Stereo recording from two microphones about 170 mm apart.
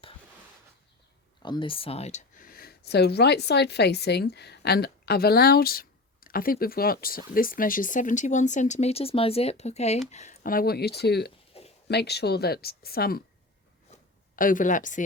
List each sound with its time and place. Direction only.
1.4 s speech: 30° left (ahead or behind)
2.4 s a woman's voice: 60° left (ahead or behind)
11.5 s a sound: 35° left (ahead or behind)
11.9 s speech: 75° left (ahead or behind)
14.3 s a woman's voice: 55° left (ahead or behind)